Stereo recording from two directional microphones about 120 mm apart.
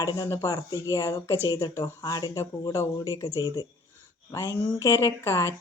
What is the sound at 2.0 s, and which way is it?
Speech, 35° left (ahead or behind).